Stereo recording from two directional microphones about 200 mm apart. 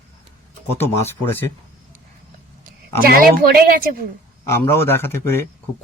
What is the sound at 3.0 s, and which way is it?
Speech, 50° right (ahead or behind).